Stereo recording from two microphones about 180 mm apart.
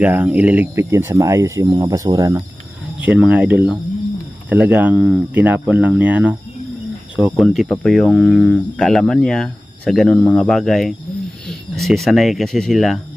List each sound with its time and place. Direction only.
0.0 s speech: 10° right (ahead or behind)
3.0 s speech: 5° right (ahead or behind)
7.4 s speech: 10° left (ahead or behind)